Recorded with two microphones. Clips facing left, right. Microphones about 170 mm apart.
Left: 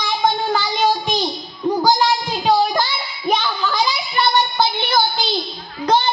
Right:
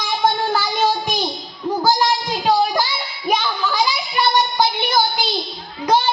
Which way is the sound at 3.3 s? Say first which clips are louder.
Even; 10° right (ahead or behind).